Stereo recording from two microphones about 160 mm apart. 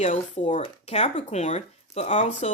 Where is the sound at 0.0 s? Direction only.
45° left (ahead or behind).